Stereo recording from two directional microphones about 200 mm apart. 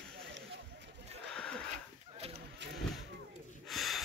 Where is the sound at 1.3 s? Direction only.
5° left (ahead or behind).